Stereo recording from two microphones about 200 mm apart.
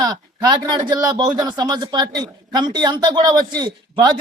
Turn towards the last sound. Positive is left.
turn(degrees=-20)  # may be behind; listen again after turning